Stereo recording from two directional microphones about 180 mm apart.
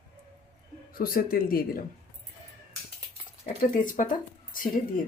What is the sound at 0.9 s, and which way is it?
Speech, 55° left (ahead or behind).